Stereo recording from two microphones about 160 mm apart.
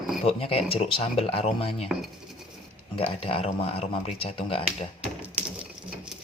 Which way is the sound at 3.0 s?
35° left (ahead or behind).